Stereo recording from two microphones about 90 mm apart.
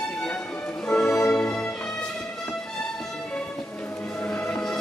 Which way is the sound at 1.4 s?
25° left (ahead or behind).